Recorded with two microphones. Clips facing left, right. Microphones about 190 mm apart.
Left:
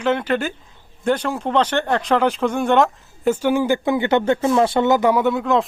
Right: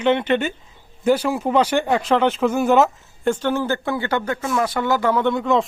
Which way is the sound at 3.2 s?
10° left (ahead or behind).